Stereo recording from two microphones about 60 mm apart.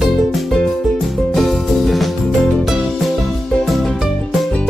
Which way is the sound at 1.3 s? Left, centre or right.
Centre.